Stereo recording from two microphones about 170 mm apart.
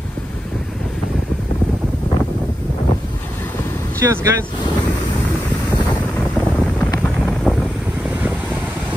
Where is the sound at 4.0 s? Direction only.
15° right (ahead or behind).